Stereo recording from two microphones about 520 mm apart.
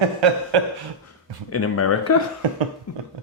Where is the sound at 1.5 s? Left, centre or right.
Left.